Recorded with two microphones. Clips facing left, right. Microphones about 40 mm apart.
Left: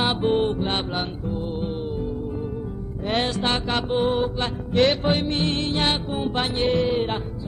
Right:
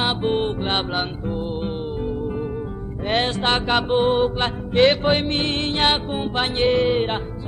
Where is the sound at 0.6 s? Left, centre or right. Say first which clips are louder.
Right 2 dB; right.